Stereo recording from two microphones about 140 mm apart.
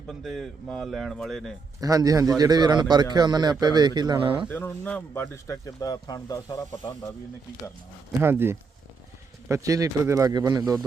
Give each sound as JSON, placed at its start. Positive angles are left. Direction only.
{"t": 0.1, "sound": "speech", "side_deg": 0}
{"t": 1.8, "sound": "a man's voice", "side_deg": -25}
{"t": 4.4, "sound": "speech", "side_deg": 15}
{"t": 8.2, "sound": "speech", "side_deg": -15}